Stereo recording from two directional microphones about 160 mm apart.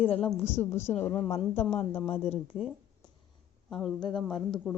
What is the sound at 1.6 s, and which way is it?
Speech, 40° left (ahead or behind).